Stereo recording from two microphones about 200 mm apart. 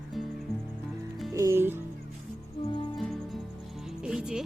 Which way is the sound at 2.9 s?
Centre (ahead or behind).